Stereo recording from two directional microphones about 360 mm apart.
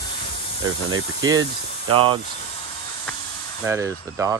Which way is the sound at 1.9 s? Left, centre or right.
Centre.